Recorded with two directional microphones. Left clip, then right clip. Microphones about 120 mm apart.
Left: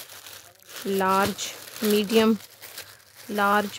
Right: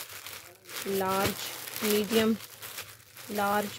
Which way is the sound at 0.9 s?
75° left (ahead or behind).